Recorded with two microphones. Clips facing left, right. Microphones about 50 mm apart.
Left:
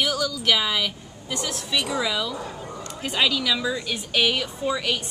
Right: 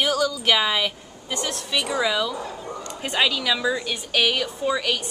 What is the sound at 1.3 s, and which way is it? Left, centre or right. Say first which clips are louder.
A woman's voice: right 1 dB; centre.